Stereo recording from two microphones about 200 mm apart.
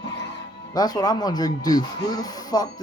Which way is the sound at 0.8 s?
20° left (ahead or behind).